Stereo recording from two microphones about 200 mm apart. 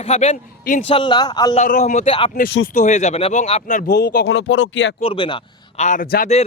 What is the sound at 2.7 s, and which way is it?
Speech, 40° left (ahead or behind).